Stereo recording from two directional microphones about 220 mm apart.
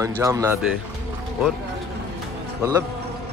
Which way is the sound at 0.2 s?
15° right (ahead or behind).